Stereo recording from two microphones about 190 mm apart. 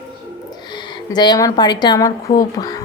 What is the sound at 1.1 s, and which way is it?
Speech, 20° left (ahead or behind).